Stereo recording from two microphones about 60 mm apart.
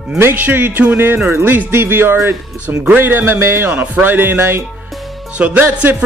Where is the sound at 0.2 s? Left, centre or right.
Right.